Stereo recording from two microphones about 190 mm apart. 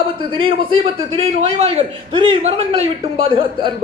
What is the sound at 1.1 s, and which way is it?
A man's voice, 30° right (ahead or behind).